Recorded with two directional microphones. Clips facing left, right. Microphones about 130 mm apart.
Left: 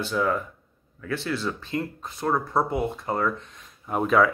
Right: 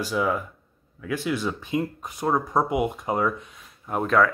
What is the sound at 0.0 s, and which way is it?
Speech, 10° right (ahead or behind).